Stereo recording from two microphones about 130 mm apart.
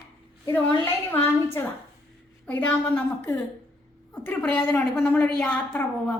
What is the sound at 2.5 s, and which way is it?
A woman's voice, 10° left (ahead or behind).